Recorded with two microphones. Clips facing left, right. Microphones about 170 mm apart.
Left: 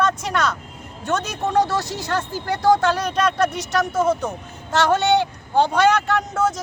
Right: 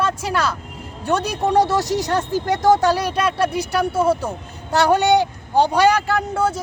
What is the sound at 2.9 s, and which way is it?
Speech, 10° right (ahead or behind).